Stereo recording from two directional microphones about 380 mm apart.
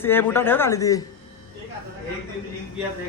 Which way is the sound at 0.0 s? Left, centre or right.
Centre.